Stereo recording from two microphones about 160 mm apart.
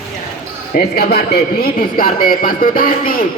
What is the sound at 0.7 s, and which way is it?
A man's voice, 75° left (ahead or behind).